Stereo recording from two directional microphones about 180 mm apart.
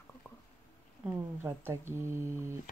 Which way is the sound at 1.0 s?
10° right (ahead or behind).